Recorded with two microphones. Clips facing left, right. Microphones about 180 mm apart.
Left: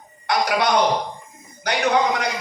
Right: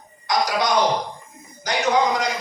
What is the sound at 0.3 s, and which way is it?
Speech, 60° left (ahead or behind).